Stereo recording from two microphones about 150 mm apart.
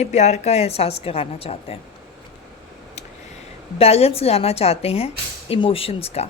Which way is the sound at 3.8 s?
40° left (ahead or behind).